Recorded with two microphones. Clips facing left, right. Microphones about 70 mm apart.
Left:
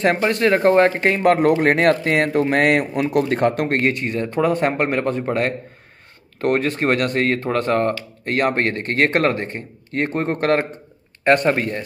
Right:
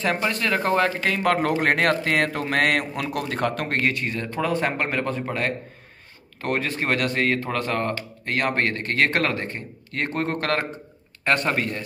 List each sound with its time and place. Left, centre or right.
0.2 s speech: left
6.4 s a man's voice: left